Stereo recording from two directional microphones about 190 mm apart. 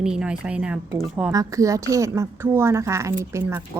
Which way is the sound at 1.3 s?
15° right (ahead or behind).